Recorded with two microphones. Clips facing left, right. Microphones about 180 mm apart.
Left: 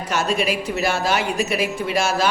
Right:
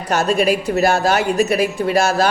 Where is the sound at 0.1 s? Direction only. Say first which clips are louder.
Right 6 dB; 40° right (ahead or behind).